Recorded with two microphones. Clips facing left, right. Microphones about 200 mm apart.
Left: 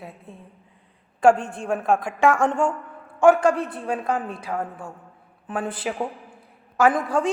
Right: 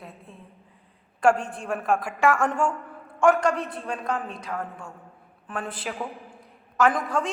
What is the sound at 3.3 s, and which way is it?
Speech, 5° left (ahead or behind).